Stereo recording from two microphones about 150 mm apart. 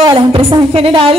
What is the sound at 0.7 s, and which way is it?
Speech, 40° right (ahead or behind).